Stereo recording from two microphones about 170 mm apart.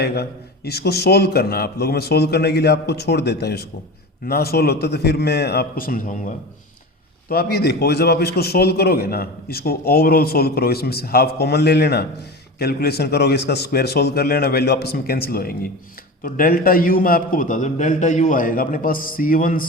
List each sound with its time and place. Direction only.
0.0 s a man's voice: 70° left (ahead or behind); by 6.3 s 50° left (ahead or behind)
7.3 s a man's voice: 70° left (ahead or behind)